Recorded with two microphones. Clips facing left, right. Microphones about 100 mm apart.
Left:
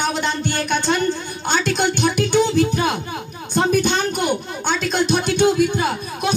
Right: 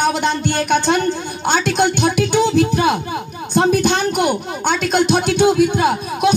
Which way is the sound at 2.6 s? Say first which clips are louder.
Right 3 dB; 65° right (ahead or behind).